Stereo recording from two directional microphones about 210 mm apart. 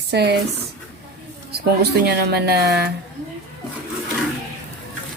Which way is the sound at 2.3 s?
50° right (ahead or behind).